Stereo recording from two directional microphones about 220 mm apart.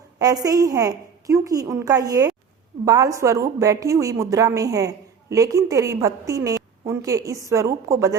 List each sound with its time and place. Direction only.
0.2 s a woman's voice: 15° right (ahead or behind)